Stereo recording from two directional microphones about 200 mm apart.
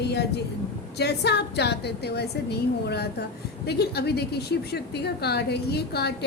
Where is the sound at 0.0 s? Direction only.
55° left (ahead or behind).